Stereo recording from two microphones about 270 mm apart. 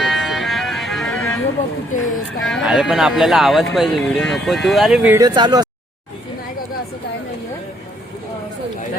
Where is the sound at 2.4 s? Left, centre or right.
Centre.